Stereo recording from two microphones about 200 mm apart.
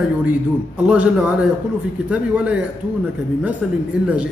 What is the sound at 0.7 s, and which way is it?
A man's voice, 5° right (ahead or behind).